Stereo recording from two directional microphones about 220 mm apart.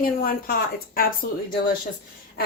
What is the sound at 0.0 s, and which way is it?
Speech, 40° left (ahead or behind).